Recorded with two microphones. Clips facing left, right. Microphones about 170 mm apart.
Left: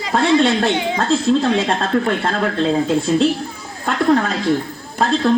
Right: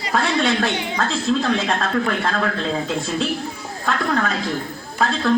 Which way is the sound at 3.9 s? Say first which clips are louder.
Left 6 dB; 30° left (ahead or behind).